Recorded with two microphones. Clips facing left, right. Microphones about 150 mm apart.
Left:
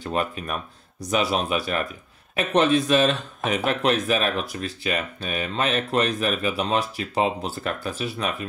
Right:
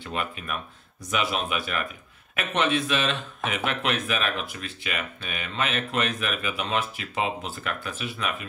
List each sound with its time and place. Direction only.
0.0 s speech: 40° left (ahead or behind)